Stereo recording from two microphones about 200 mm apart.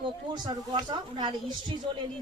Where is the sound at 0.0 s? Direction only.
25° right (ahead or behind).